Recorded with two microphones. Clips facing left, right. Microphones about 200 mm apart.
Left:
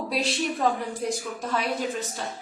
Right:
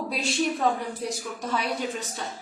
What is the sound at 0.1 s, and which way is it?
A woman's voice, centre (ahead or behind).